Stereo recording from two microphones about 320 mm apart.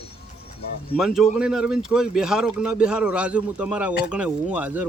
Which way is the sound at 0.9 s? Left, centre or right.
Centre.